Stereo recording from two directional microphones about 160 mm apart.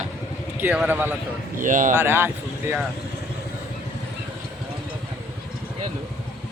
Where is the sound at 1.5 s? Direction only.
55° right (ahead or behind).